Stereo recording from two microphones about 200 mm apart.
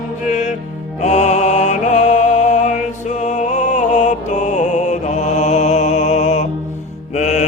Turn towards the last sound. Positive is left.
turn(degrees=35)  # may be behind; listen again after turning